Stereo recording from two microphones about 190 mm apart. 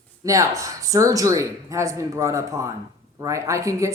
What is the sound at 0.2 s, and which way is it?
Speech, 15° right (ahead or behind).